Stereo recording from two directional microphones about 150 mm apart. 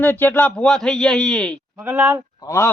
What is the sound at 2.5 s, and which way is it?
Speech, 20° left (ahead or behind).